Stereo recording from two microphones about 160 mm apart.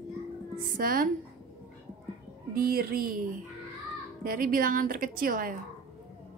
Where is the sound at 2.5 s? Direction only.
65° right (ahead or behind).